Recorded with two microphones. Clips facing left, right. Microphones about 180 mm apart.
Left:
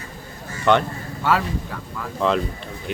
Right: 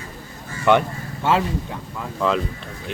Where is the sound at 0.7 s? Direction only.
5° right (ahead or behind).